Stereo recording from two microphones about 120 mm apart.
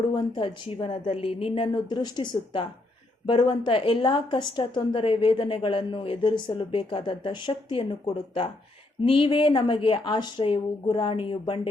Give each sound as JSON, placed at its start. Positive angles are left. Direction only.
{"t": 0.1, "sound": "a woman's voice", "side_deg": 40}